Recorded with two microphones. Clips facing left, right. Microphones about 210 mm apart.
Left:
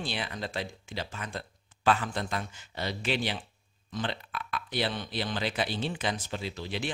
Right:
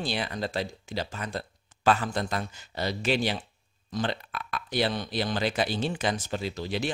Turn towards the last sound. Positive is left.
turn(degrees=-40)  # may be behind; listen again after turning